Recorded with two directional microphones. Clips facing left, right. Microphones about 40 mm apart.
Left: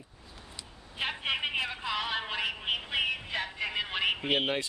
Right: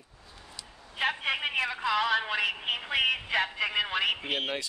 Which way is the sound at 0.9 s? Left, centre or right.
Right.